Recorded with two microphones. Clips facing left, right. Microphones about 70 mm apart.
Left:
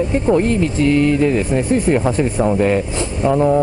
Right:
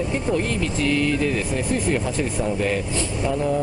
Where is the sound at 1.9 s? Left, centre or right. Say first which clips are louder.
Left 7 dB; left.